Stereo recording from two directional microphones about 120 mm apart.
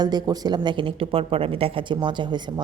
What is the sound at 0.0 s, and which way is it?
Speech, 35° right (ahead or behind).